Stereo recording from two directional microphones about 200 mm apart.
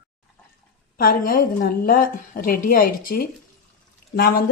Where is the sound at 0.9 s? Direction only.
45° left (ahead or behind).